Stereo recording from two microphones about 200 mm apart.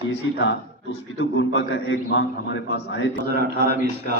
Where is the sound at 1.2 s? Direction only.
75° left (ahead or behind); by 3.1 s 60° left (ahead or behind).